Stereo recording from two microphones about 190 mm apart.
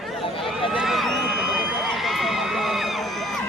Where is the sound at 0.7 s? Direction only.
Centre (ahead or behind).